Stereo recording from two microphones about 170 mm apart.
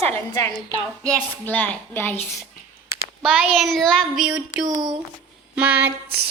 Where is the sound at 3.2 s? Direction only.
5° right (ahead or behind).